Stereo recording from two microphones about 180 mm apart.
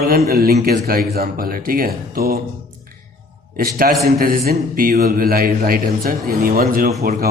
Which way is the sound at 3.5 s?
55° right (ahead or behind).